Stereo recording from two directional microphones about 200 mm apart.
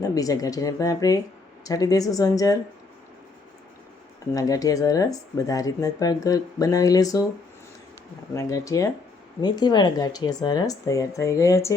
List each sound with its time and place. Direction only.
0.0 s speech: 15° left (ahead or behind)
4.4 s speech: 15° left (ahead or behind)
8.4 s speech: 15° left (ahead or behind)